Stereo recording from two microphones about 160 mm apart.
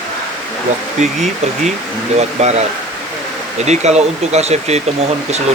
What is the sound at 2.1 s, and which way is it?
Speech, 45° right (ahead or behind).